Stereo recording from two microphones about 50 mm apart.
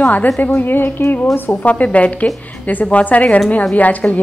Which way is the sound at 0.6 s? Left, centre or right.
Left.